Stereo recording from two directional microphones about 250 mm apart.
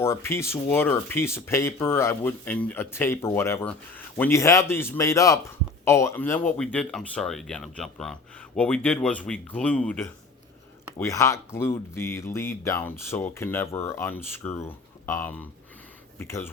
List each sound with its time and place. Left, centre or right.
0.0 s speech: centre